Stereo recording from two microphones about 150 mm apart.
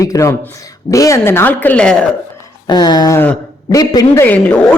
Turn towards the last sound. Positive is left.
turn(degrees=10)  # may be behind; listen again after turning